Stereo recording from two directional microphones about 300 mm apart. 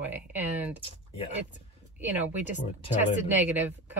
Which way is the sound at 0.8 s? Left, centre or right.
Centre.